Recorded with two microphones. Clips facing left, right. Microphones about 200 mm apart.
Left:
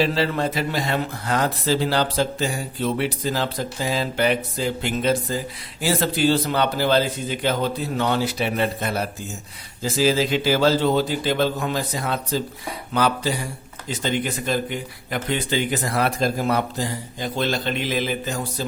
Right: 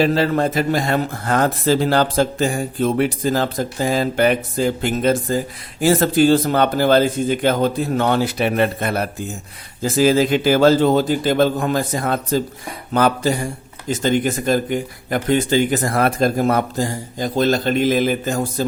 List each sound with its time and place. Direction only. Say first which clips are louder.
0.0 s speech: right 5 dB; 50° right (ahead or behind)